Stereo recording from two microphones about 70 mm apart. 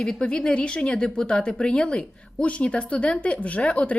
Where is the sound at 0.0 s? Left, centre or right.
Centre.